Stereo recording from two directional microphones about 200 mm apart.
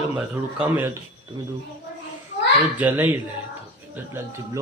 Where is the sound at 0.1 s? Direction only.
10° right (ahead or behind).